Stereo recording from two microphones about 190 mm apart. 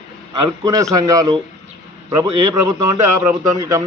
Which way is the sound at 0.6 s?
20° right (ahead or behind).